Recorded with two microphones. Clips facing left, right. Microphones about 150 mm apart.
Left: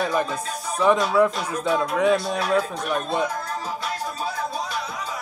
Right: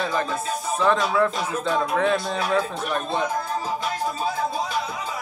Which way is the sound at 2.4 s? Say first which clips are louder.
Left 1 dB; centre (ahead or behind).